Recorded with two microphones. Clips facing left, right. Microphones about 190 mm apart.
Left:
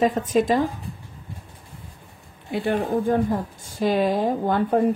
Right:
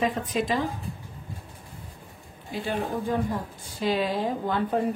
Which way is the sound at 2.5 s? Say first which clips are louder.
Left 6 dB; 55° left (ahead or behind).